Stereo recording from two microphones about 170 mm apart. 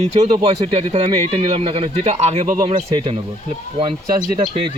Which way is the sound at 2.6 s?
35° right (ahead or behind).